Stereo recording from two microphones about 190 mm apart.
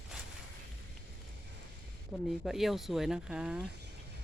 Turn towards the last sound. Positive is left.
turn(degrees=-5)  # may be behind; listen again after turning